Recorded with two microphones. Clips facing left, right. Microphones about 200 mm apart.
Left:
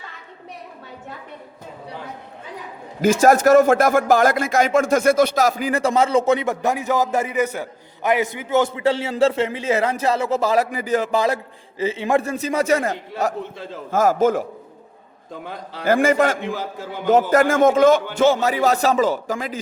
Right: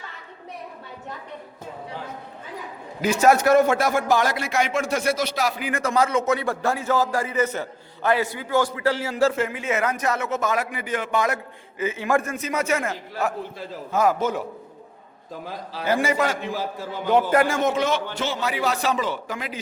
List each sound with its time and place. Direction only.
3.0 s a man's voice: 50° left (ahead or behind)
15.9 s a man's voice: 50° left (ahead or behind)